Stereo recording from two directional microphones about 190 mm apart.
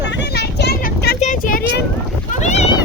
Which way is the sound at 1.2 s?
45° left (ahead or behind).